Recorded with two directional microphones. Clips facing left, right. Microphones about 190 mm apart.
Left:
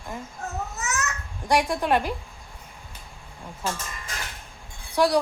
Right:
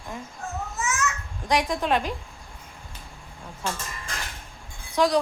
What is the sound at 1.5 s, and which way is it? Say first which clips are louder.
Speech: left 1 dB; 10° left (ahead or behind).